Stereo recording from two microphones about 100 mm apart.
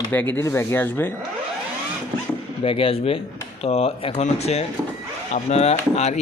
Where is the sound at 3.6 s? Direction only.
80° left.